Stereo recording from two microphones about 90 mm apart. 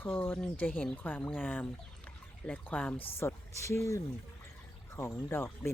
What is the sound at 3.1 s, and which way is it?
Speech, 30° left (ahead or behind).